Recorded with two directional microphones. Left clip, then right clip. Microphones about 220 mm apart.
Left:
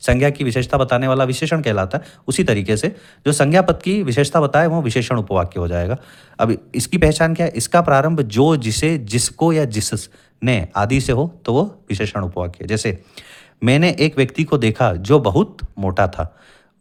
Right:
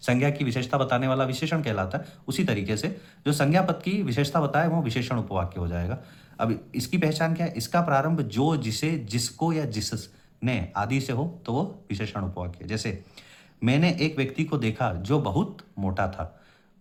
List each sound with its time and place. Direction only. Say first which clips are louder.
0.0 s speech: left 9 dB; 40° left (ahead or behind)